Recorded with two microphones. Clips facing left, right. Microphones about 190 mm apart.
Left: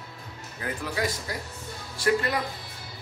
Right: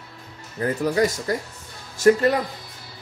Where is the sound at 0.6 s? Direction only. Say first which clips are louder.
Right 9 dB; 40° right (ahead or behind).